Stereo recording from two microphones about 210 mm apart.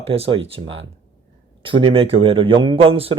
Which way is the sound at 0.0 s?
25° right (ahead or behind).